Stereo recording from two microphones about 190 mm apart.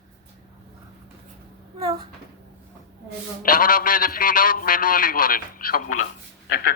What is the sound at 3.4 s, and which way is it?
A man's voice, 45° left (ahead or behind).